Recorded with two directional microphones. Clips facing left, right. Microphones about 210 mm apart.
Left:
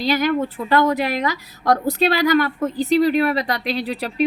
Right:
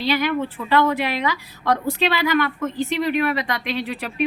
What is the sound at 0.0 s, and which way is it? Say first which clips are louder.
A woman's voice: left 2 dB; 40° left (ahead or behind).